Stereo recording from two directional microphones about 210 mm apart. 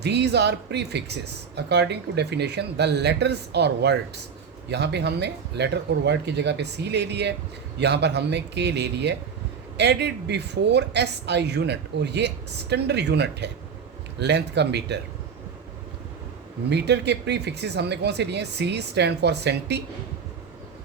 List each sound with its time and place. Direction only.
0.0 s speech: 55° right (ahead or behind)
16.6 s speech: 55° right (ahead or behind)